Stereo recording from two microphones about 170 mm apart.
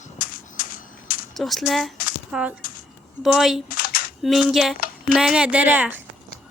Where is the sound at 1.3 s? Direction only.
Centre (ahead or behind).